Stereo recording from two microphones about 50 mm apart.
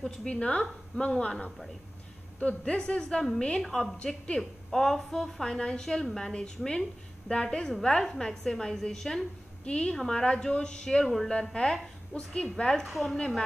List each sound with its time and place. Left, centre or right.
0.0 s a woman's voice: centre
3.6 s a woman's voice: centre
4.0 s a woman's voice: centre
9.7 s a woman's voice: left
9.9 s a woman's voice: centre
12.5 s a woman's voice: centre
12.8 s a woman's voice: centre